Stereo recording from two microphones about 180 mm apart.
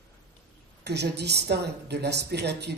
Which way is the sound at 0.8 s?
70° right (ahead or behind).